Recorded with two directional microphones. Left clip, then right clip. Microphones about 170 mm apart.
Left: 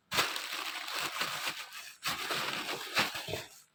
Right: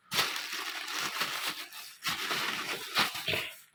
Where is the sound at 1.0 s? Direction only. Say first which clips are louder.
Right 2 dB; 40° left (ahead or behind).